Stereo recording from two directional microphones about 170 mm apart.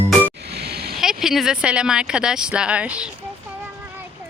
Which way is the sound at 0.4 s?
70° right (ahead or behind).